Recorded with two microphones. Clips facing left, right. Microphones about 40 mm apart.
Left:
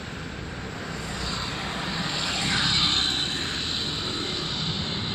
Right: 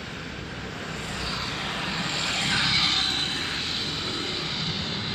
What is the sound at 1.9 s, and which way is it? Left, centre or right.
Vehicle, right.